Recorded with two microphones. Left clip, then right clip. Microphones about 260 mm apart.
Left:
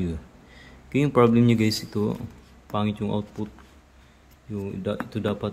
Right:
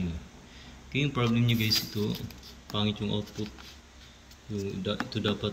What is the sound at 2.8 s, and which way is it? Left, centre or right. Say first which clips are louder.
Speech: left 4 dB; centre.